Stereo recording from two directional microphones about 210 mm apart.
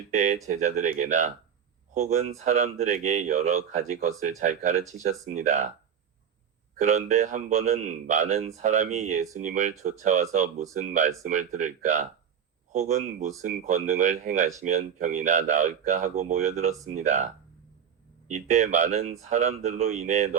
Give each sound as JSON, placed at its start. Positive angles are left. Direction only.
{"t": 0.1, "sound": "speech", "side_deg": -35}
{"t": 6.7, "sound": "speech", "side_deg": -35}
{"t": 18.3, "sound": "speech", "side_deg": -35}